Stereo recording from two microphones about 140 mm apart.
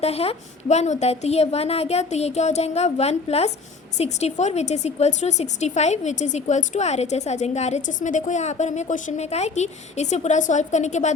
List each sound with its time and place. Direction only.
0.0 s a woman's voice: 45° left (ahead or behind)